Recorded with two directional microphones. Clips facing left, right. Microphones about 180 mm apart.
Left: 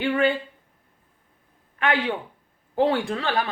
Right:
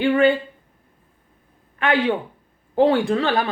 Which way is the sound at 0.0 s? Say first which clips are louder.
Right 5 dB; 30° right (ahead or behind).